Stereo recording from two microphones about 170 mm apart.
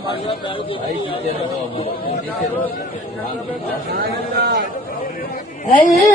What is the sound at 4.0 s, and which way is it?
Speech, 65° right (ahead or behind).